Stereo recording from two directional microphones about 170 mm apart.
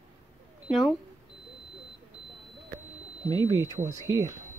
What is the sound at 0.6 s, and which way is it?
Speech, centre (ahead or behind).